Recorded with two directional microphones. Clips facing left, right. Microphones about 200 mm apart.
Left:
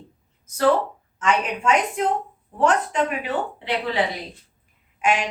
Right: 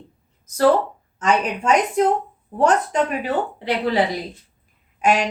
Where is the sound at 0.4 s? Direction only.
40° right (ahead or behind).